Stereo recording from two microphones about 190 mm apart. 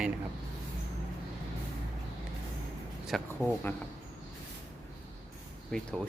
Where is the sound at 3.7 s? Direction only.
15° left (ahead or behind).